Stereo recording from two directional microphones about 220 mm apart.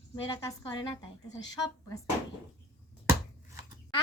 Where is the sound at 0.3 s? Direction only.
20° left (ahead or behind).